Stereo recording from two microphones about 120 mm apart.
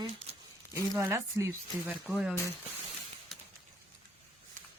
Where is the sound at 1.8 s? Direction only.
10° right (ahead or behind).